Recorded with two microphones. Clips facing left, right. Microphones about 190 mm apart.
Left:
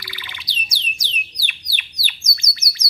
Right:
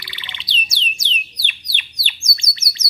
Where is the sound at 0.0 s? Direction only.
25° right (ahead or behind).